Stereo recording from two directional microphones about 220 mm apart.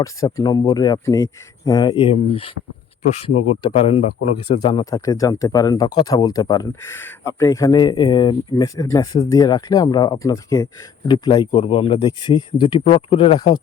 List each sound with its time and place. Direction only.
0.0 s speech: 15° left (ahead or behind)
3.6 s speech: 25° left (ahead or behind)